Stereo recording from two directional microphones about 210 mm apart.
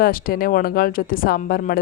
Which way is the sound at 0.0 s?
45° left (ahead or behind).